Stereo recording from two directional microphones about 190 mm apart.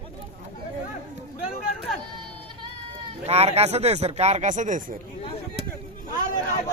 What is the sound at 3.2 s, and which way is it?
Speech, 35° right (ahead or behind).